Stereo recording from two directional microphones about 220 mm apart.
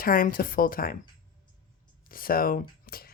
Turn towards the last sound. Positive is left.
turn(degrees=45)  # may be behind; listen again after turning